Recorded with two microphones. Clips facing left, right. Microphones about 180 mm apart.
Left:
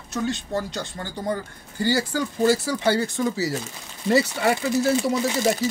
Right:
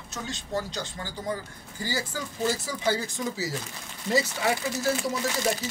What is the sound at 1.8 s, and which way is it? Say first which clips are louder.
Speech: left 9 dB; 70° left (ahead or behind).